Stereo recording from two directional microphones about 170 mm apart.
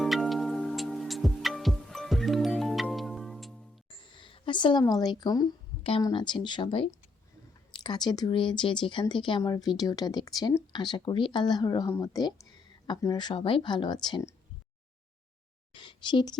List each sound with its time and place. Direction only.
0.0 s music: centre (ahead or behind)
3.9 s a sound: 30° left (ahead or behind)
6.0 s speech: 25° left (ahead or behind)
15.7 s speech: 30° left (ahead or behind)